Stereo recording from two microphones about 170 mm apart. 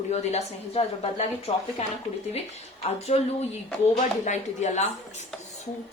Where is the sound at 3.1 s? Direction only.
45° left (ahead or behind).